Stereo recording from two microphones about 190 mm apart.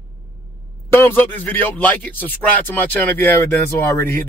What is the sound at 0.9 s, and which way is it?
Speech, 10° left (ahead or behind).